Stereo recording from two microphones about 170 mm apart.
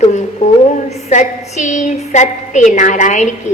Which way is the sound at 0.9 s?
45° left (ahead or behind).